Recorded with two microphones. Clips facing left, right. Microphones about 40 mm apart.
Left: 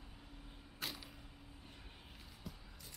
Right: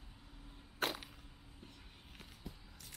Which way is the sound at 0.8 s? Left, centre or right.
Right.